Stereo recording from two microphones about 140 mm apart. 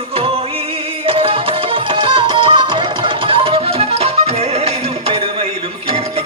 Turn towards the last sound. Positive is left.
turn(degrees=-50)  # may be behind; listen again after turning